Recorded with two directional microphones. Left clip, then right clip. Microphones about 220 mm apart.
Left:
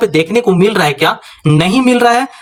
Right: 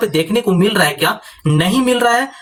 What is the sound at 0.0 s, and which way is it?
Speech, 25° left (ahead or behind).